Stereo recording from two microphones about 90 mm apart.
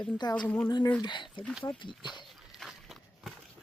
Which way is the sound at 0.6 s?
45° left (ahead or behind).